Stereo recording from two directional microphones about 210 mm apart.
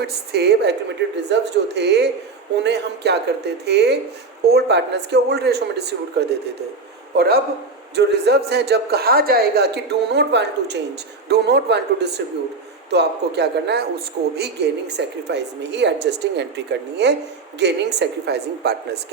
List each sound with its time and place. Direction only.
0.0 s a woman's voice: 50° right (ahead or behind)